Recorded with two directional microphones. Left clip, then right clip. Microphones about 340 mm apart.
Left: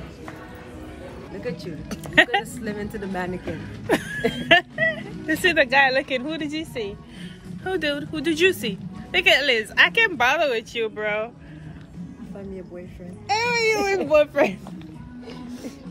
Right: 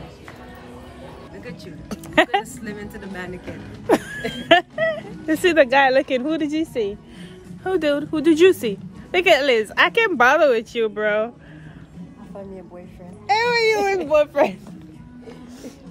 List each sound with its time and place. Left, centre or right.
1.4 s speech: centre
1.9 s speech: centre
2.6 s a woman's voice: centre
3.8 s a sound: centre
4.2 s speech: centre
4.5 s speech: right
13.3 s a sound: right
14.1 s a child's voice: centre